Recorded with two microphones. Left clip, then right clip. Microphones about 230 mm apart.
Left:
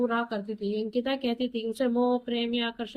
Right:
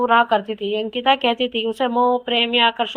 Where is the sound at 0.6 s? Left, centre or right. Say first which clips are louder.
Right 7 dB; right.